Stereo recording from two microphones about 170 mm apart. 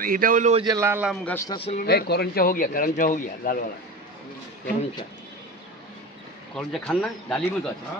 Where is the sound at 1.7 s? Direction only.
65° left (ahead or behind).